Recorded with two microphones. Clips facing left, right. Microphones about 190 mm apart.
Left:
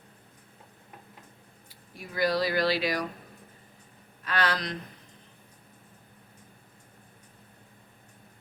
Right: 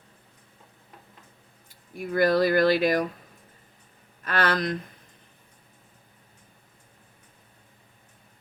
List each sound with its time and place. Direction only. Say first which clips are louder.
2.0 s speech: right 6 dB; 55° right (ahead or behind)
4.2 s speech: right 4 dB; 50° right (ahead or behind)